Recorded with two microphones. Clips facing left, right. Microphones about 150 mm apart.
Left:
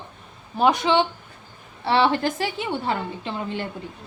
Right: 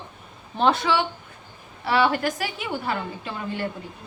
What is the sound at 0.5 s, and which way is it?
Speech, 15° left (ahead or behind).